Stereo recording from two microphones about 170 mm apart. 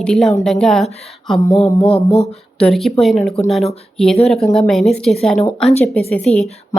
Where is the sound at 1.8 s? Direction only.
35° left (ahead or behind).